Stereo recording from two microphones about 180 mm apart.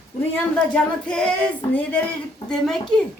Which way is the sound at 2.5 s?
5° left (ahead or behind).